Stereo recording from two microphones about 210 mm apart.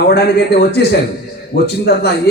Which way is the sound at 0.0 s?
50° left (ahead or behind).